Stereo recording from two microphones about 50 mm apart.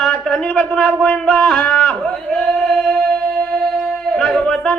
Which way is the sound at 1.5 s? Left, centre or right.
Left.